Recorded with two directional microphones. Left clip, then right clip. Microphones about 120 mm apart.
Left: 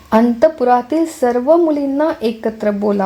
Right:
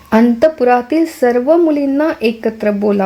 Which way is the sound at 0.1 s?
25° right (ahead or behind).